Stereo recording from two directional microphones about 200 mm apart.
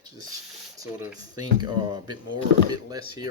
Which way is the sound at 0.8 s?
20° right (ahead or behind).